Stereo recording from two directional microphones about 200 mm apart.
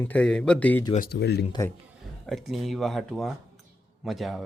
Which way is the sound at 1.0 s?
55° left (ahead or behind).